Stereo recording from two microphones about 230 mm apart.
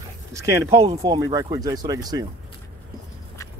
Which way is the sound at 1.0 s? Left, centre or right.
Centre.